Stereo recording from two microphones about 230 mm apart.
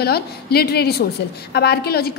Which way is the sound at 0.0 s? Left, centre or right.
Left.